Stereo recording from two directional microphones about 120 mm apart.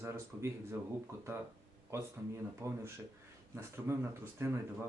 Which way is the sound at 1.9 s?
20° right (ahead or behind).